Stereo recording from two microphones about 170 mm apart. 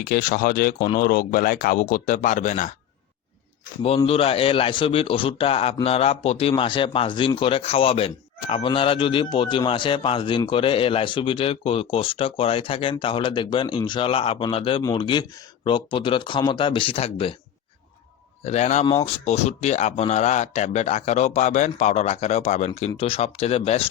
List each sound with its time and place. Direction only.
0.0 s speech: 50° left (ahead or behind)
3.8 s speech: 35° left (ahead or behind)
18.4 s speech: 40° left (ahead or behind)